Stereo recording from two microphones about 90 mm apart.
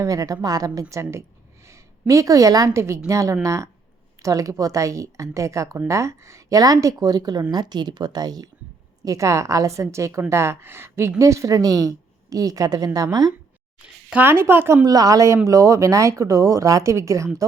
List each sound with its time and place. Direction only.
0.0 s a woman's voice: 40° right (ahead or behind)
9.0 s a woman's voice: 35° right (ahead or behind)
14.1 s speech: 20° right (ahead or behind)
14.8 s a woman's voice: 40° right (ahead or behind)